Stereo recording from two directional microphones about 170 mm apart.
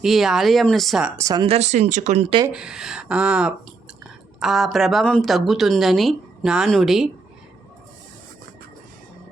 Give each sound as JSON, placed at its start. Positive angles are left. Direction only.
{"t": 0.0, "sound": "speech", "side_deg": 0}
{"t": 1.2, "sound": "speech", "side_deg": -25}
{"t": 1.5, "sound": "speech", "side_deg": -40}
{"t": 2.5, "sound": "speech", "side_deg": -5}